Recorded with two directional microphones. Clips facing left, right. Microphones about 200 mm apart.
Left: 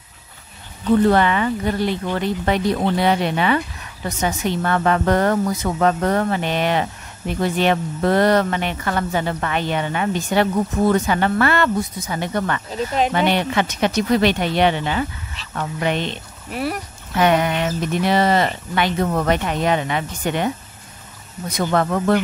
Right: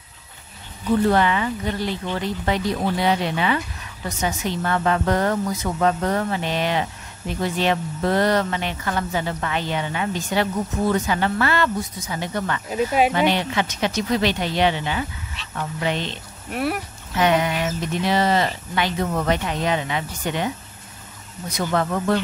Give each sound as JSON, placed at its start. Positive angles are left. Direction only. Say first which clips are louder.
{"t": 1.1, "sound": "a woman's voice", "louder": "left 3 dB", "side_deg": 60}
{"t": 12.6, "sound": "speech", "louder": "right 1 dB", "side_deg": -10}
{"t": 13.1, "sound": "a woman's voice", "louder": "left 2 dB", "side_deg": 55}
{"t": 16.4, "sound": "speech", "louder": "even", "side_deg": 0}
{"t": 17.1, "sound": "a woman's voice", "louder": "left 2 dB", "side_deg": 55}
{"t": 21.5, "sound": "a woman's voice", "louder": "left 3 dB", "side_deg": 60}